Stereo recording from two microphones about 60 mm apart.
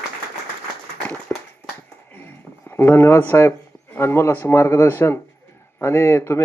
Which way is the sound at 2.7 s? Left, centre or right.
Left.